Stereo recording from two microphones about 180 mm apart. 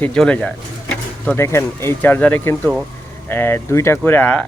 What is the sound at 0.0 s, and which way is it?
Speech, 5° left (ahead or behind).